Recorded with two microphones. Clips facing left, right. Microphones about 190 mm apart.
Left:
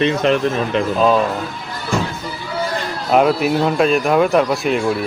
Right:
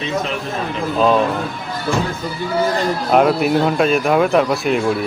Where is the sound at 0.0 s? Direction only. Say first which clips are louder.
Left 7 dB; 70° left (ahead or behind).